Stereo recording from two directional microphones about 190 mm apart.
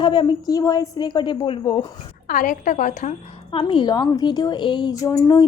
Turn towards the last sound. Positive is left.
turn(degrees=20)  # may be behind; listen again after turning